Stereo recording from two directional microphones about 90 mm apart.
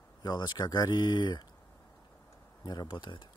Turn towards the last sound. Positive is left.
turn(degrees=65)  # may be behind; listen again after turning